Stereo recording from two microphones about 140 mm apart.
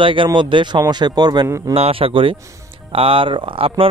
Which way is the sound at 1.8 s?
40° right (ahead or behind).